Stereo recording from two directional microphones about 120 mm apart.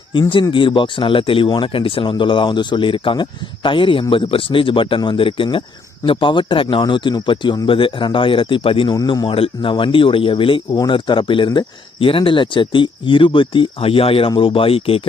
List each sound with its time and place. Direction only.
0.1 s speech: 45° left (ahead or behind)